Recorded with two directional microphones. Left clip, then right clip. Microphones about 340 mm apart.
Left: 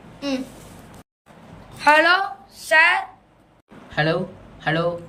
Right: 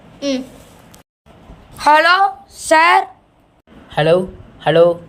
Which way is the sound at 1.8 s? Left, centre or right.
Centre.